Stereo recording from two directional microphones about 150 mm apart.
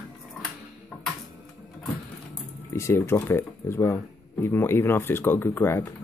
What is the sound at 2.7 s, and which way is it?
Speech, 20° left (ahead or behind).